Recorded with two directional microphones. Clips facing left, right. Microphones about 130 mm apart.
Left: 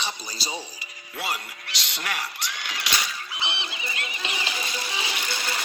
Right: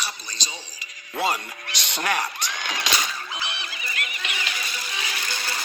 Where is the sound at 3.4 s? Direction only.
25° left (ahead or behind).